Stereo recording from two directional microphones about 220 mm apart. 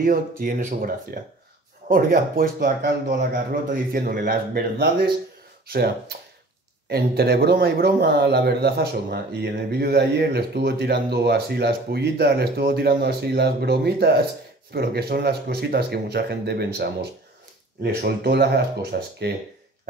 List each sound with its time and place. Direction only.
0.0 s speech: 40° right (ahead or behind)